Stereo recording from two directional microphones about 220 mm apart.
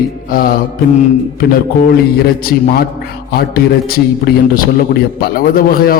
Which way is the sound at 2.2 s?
45° left (ahead or behind).